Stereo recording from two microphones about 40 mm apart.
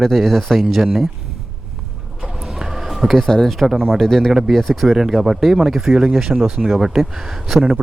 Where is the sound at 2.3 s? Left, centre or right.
Centre.